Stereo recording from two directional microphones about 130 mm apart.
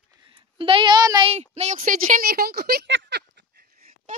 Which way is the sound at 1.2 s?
55° right (ahead or behind).